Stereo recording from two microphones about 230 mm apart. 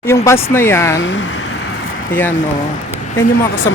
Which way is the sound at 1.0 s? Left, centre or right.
Left.